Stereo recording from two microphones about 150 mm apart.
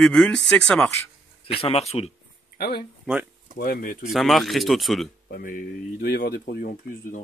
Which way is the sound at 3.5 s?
70° left (ahead or behind).